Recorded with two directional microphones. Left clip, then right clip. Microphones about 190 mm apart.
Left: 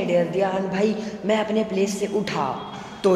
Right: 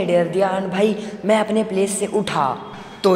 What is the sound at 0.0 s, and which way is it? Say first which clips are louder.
A woman's voice: right 4 dB; 30° right (ahead or behind).